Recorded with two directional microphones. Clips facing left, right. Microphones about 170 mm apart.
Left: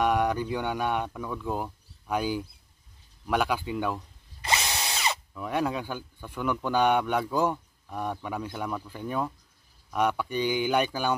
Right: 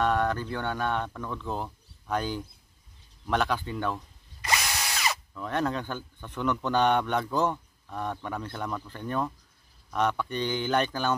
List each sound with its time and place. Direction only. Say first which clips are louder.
0.0 s speech: left 1 dB; 15° left (ahead or behind)
4.4 s drill: left 1 dB; 25° left (ahead or behind)
5.3 s speech: even; 10° left (ahead or behind)